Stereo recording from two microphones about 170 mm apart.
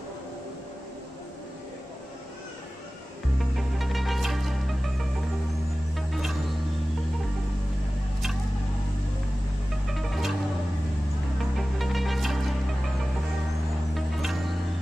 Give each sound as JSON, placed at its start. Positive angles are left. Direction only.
{"t": 3.5, "sound": "music", "side_deg": 0}
{"t": 9.8, "sound": "music", "side_deg": 0}
{"t": 11.5, "sound": "music", "side_deg": 0}
{"t": 13.9, "sound": "music", "side_deg": 0}